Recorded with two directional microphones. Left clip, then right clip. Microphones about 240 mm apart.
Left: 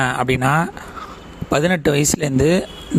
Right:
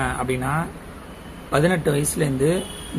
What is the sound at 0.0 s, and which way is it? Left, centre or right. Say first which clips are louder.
Speech: left 6 dB; left.